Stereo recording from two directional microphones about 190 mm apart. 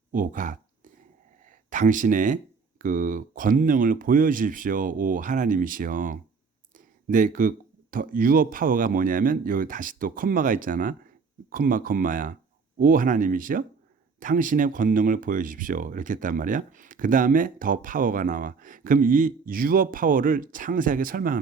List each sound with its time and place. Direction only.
0.1 s speech: 45° right (ahead or behind)
1.7 s speech: 45° right (ahead or behind)